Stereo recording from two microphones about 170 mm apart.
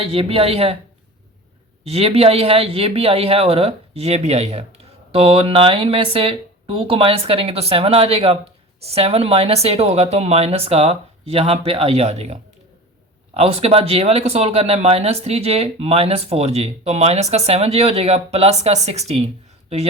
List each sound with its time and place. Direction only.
0.0 s speech: 35° right (ahead or behind)
1.8 s speech: 35° right (ahead or behind)